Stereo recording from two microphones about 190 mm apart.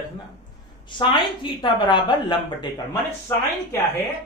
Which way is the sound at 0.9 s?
25° left (ahead or behind).